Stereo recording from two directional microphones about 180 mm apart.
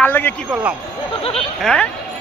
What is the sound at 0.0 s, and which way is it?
Speech, 10° left (ahead or behind).